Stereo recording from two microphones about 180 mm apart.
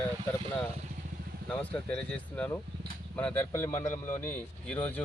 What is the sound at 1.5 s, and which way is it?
Speech, 5° left (ahead or behind).